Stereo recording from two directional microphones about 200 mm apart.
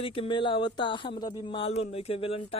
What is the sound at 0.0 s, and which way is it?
A man's voice, 25° left (ahead or behind).